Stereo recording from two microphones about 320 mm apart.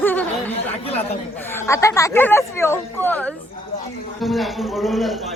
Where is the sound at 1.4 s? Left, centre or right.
Centre.